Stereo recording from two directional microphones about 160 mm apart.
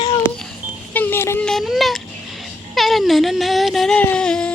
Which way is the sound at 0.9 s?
10° left (ahead or behind).